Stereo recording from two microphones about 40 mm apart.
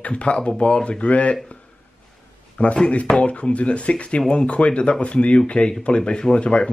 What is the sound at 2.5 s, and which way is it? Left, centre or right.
Speech, left.